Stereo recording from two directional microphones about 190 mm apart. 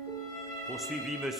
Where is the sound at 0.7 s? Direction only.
Centre (ahead or behind).